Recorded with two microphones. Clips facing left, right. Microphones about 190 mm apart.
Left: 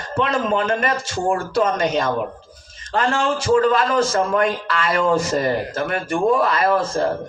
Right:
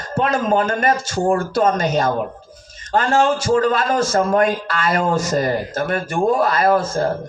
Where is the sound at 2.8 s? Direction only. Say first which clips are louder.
Right 1 dB; 30° left (ahead or behind).